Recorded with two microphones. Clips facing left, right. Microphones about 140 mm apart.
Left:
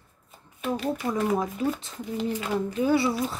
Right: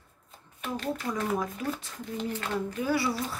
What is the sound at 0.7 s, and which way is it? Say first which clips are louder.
Speech: left 3 dB; 5° left (ahead or behind).